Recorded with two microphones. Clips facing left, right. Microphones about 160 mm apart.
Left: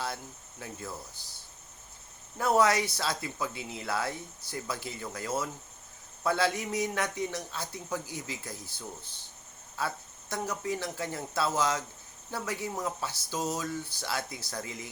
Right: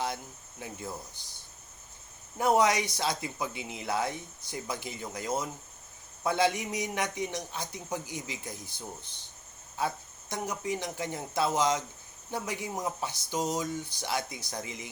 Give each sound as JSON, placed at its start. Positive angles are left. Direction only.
{"t": 0.6, "sound": "speech", "side_deg": -20}
{"t": 2.4, "sound": "a man's voice", "side_deg": -20}